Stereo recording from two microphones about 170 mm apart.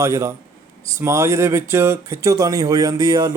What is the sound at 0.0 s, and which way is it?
Speech, 20° right (ahead or behind).